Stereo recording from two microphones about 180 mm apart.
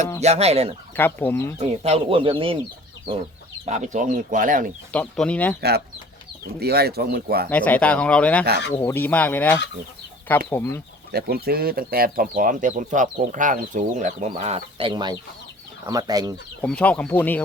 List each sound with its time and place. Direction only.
0.2 s speech: 35° right (ahead or behind)
0.9 s speech: 10° left (ahead or behind)
1.8 s speech: 35° right (ahead or behind)
3.7 s speech: 40° right (ahead or behind)
4.9 s speech: 5° left (ahead or behind)
5.5 s speech: 65° right (ahead or behind)
7.5 s speech: 10° left (ahead or behind)
11.1 s speech: 60° right (ahead or behind); by 16.3 s 20° right (ahead or behind)
16.6 s speech: 5° left (ahead or behind)